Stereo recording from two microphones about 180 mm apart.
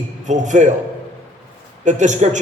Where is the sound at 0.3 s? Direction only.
40° right (ahead or behind).